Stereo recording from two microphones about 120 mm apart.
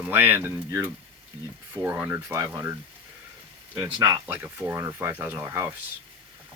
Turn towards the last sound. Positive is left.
turn(degrees=-20)  # may be behind; listen again after turning